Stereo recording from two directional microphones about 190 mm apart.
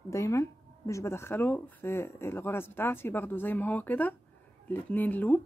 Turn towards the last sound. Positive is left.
turn(degrees=10)  # may be behind; listen again after turning